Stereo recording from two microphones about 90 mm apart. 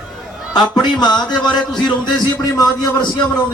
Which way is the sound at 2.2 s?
45° left (ahead or behind).